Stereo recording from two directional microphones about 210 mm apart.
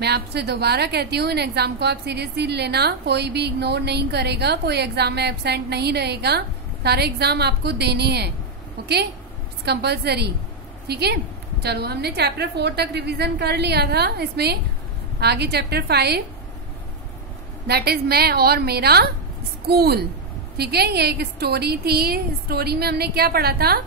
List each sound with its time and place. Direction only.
0.0 s a woman's voice: 50° right (ahead or behind)
9.7 s a woman's voice: 50° right (ahead or behind)
17.6 s a woman's voice: 50° right (ahead or behind)